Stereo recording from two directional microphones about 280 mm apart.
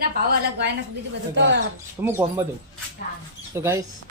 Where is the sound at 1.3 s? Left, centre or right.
Right.